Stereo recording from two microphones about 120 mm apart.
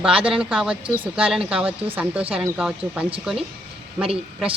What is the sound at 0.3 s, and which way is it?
Speech, 5° right (ahead or behind).